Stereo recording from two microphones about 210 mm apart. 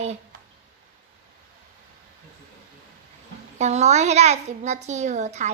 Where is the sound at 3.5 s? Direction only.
35° right (ahead or behind).